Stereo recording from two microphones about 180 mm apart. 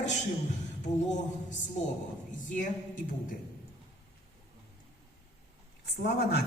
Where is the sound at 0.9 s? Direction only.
45° left (ahead or behind).